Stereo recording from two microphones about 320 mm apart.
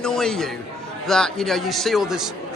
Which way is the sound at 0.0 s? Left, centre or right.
Centre.